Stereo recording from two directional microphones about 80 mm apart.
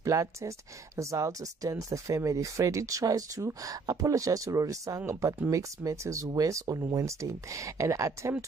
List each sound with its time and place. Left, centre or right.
0.0 s speech: right